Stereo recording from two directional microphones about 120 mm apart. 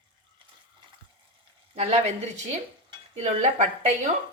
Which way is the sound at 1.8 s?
60° right (ahead or behind).